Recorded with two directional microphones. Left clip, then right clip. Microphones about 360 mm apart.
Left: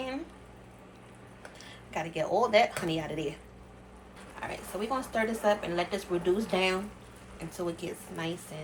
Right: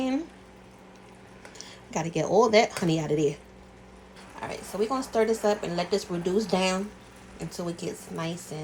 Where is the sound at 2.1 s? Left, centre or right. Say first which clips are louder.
Right 4 dB; centre.